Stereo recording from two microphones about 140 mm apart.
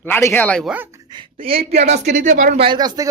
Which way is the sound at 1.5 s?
45° right (ahead or behind).